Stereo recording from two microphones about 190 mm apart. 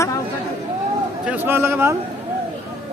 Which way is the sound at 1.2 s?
10° right (ahead or behind).